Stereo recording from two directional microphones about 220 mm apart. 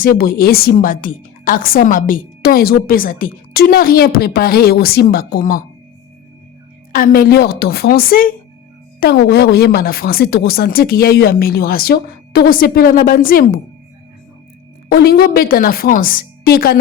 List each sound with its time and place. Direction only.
0.0 s a woman's voice: 40° left (ahead or behind)
6.9 s speech: 40° left (ahead or behind)
14.8 s a woman's voice: 45° left (ahead or behind)